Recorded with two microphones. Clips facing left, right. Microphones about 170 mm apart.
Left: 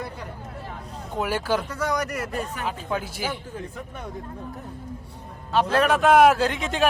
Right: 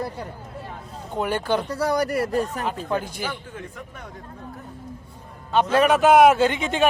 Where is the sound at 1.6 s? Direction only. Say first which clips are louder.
Right 4 dB; 35° right (ahead or behind).